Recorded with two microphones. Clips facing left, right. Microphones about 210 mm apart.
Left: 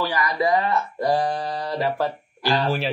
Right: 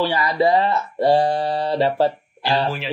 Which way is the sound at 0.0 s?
30° right (ahead or behind).